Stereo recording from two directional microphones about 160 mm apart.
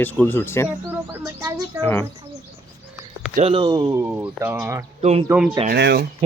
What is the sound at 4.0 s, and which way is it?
Speech, 10° right (ahead or behind).